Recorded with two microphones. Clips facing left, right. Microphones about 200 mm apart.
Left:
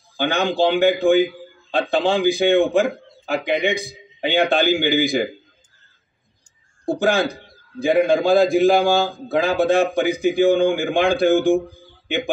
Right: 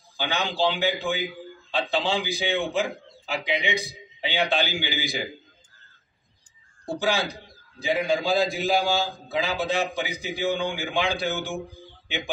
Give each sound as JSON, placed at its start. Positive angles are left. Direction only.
{"t": 0.2, "sound": "a man's voice", "side_deg": 55}
{"t": 6.9, "sound": "a man's voice", "side_deg": 55}